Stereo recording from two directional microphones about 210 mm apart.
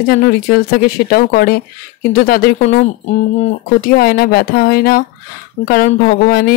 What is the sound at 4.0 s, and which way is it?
Speech, 45° left (ahead or behind).